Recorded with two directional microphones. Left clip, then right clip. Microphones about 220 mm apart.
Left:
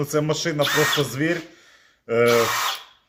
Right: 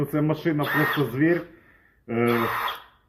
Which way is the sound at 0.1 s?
50° left (ahead or behind).